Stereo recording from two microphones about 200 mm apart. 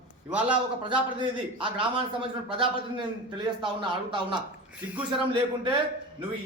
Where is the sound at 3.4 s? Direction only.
25° right (ahead or behind).